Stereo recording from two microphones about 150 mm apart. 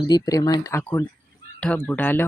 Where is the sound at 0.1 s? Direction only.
25° left (ahead or behind).